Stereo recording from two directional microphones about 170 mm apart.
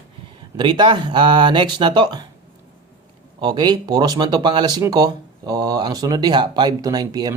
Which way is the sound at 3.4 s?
25° right (ahead or behind).